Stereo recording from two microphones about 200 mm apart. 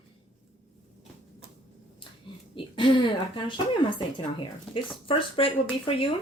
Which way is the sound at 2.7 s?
25° left (ahead or behind).